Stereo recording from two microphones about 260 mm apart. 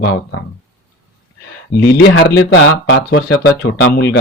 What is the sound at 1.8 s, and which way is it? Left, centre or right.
Speech, left.